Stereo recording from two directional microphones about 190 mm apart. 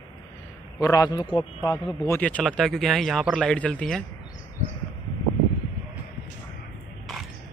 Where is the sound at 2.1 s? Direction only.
5° left (ahead or behind).